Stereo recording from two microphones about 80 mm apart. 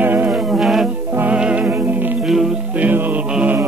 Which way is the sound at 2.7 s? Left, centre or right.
Centre.